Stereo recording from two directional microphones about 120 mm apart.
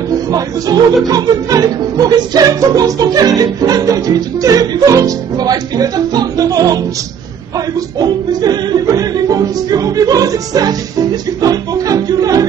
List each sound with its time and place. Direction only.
0.3 s speech: 30° right (ahead or behind)
8.0 s speech: 35° right (ahead or behind)